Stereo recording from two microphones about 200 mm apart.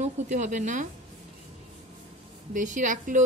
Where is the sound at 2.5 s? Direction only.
40° right (ahead or behind).